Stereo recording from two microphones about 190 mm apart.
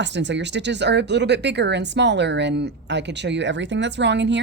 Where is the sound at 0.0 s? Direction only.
70° right (ahead or behind).